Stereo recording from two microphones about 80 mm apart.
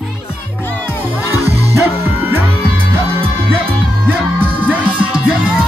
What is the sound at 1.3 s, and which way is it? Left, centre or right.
Music, right.